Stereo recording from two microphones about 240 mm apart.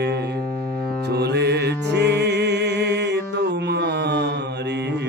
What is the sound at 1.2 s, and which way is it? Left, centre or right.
Music, right.